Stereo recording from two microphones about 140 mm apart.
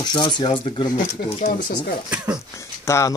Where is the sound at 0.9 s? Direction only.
85° left.